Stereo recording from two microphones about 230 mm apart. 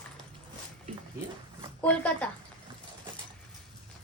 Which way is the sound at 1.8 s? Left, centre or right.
Centre.